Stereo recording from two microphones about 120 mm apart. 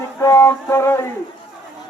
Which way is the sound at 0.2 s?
25° left (ahead or behind).